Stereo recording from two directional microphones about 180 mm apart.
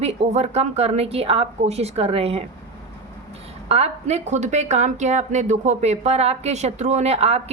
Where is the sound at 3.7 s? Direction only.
35° right (ahead or behind).